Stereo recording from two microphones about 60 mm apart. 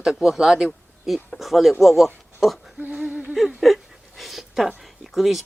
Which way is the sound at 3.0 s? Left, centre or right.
Right.